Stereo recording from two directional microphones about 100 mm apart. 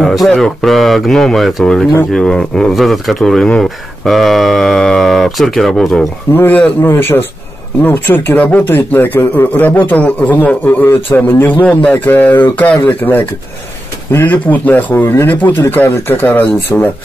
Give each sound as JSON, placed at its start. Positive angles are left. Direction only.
{"t": 0.0, "sound": "speech", "side_deg": 0}
{"t": 6.3, "sound": "speech", "side_deg": 20}